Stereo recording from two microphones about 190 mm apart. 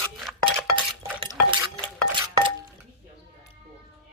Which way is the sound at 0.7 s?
25° right (ahead or behind).